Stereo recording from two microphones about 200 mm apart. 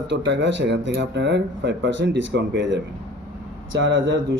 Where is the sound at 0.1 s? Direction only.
65° right (ahead or behind).